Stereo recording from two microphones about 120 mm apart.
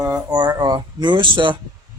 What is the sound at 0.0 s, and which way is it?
Speech, 25° right (ahead or behind).